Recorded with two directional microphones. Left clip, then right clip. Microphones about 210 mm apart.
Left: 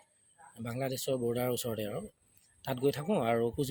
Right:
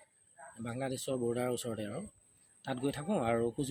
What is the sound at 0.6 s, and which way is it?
Speech, 45° left (ahead or behind).